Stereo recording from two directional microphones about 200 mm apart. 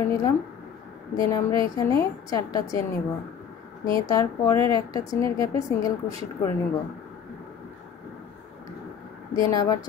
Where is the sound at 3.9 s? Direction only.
20° left (ahead or behind).